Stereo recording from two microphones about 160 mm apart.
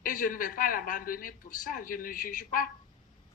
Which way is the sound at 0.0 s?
60° left (ahead or behind).